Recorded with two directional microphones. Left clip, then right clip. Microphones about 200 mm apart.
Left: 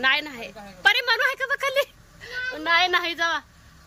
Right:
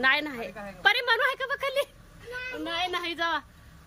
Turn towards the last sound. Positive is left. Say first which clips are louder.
# left 6 dB
turn(degrees=-10)  # may be behind; listen again after turning